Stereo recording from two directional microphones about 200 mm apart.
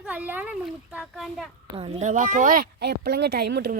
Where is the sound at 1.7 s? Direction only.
30° right (ahead or behind).